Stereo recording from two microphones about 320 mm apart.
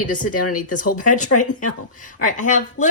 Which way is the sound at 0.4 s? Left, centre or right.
Left.